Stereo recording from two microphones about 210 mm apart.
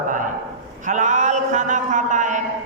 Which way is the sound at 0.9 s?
35° right (ahead or behind).